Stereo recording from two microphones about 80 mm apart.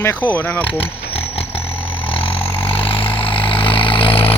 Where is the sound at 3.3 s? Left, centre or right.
Left.